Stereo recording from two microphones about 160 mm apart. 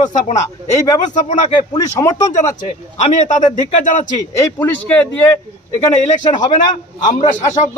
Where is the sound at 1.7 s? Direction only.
20° left (ahead or behind).